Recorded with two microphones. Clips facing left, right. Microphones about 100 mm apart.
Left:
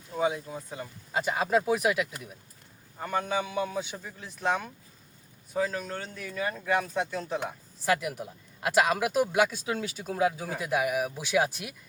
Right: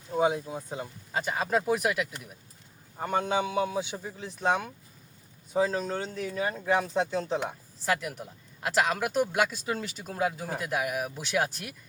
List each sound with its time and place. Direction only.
0.1 s a sound: 25° right (ahead or behind)
0.4 s a man's voice: 20° right (ahead or behind)
1.1 s speech: 5° left (ahead or behind)
3.0 s a man's voice: 25° right (ahead or behind)
7.9 s speech: 5° left (ahead or behind)